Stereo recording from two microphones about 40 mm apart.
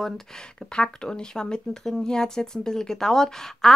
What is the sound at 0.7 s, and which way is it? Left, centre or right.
Speech, centre.